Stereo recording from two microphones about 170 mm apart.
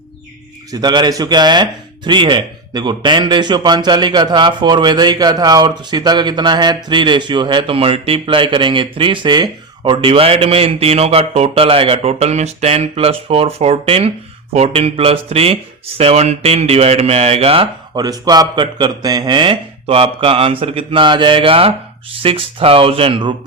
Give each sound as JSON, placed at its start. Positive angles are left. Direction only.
{"t": 0.7, "sound": "a man's voice", "side_deg": -25}